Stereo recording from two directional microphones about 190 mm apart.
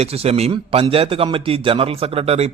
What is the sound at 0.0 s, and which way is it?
Speech, 30° right (ahead or behind).